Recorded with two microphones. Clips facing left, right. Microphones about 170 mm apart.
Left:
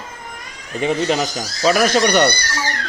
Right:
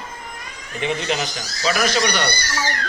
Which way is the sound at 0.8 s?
40° left (ahead or behind).